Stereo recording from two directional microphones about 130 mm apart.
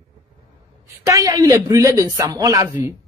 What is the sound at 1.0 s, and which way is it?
Speech, 25° right (ahead or behind).